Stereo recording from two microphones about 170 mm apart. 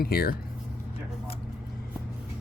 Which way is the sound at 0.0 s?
65° left (ahead or behind).